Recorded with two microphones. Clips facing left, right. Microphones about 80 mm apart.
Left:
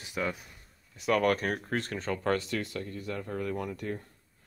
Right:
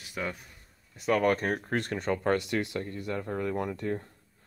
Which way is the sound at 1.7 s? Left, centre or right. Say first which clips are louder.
Right 2 dB; right.